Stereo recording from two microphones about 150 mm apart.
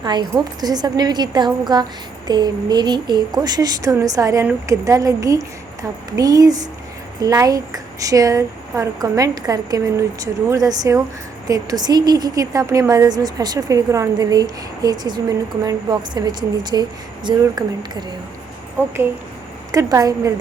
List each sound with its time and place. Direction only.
0.0 s a woman's voice: 30° right (ahead or behind)
19.7 s a woman's voice: 20° right (ahead or behind)